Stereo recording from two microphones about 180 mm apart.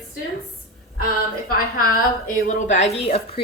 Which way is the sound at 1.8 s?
50° left (ahead or behind).